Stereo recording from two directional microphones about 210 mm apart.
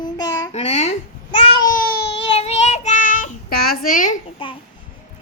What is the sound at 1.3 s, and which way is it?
Babbling, 20° left (ahead or behind).